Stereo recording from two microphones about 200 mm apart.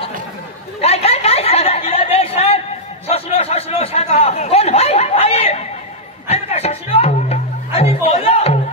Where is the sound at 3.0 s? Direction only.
30° left (ahead or behind).